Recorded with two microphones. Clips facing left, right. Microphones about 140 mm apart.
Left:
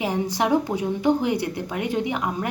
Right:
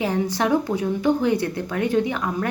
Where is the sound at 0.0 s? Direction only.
15° left (ahead or behind).